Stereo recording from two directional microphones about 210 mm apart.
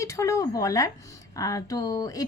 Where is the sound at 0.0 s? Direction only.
15° left (ahead or behind).